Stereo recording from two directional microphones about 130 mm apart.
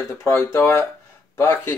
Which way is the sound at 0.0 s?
20° left (ahead or behind).